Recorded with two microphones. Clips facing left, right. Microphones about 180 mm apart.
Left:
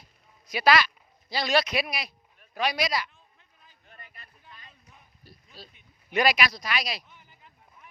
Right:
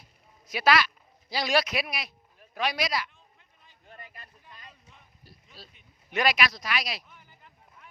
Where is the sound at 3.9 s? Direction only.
40° right (ahead or behind).